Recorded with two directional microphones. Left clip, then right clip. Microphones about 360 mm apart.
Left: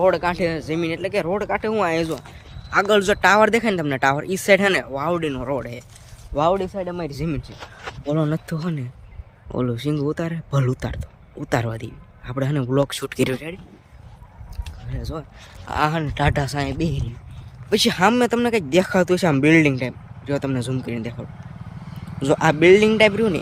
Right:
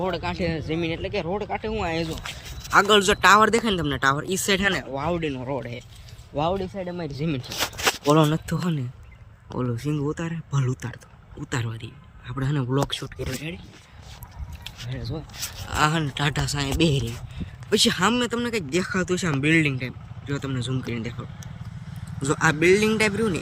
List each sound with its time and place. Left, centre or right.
0.0 s speech: centre
4.6 s speech: left
4.9 s speech: centre
14.6 s a sound: centre
15.7 s speech: centre
16.8 s speech: centre
17.7 s speech: centre
22.2 s speech: centre